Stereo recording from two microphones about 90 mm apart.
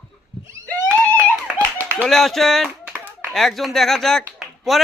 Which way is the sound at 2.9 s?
20° right (ahead or behind).